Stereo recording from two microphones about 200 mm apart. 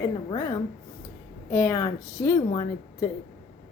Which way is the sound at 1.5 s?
10° left (ahead or behind).